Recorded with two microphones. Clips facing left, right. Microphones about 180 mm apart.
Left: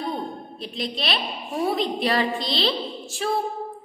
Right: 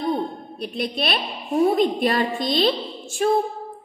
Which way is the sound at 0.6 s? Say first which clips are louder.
Right 5 dB; 55° right (ahead or behind).